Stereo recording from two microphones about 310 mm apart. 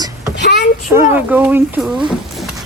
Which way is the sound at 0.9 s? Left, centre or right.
Centre.